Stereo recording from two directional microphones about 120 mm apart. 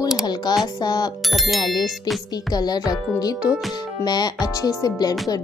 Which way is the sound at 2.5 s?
35° left (ahead or behind).